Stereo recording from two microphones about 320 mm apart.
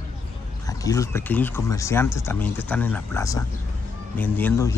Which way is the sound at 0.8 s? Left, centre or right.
Centre.